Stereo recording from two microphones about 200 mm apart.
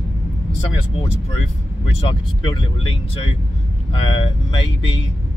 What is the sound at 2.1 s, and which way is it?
Speech, 25° left (ahead or behind).